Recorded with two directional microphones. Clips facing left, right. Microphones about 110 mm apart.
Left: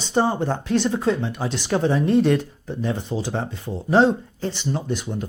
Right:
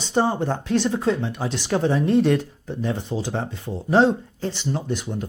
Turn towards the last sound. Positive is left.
turn(degrees=25)  # may be behind; listen again after turning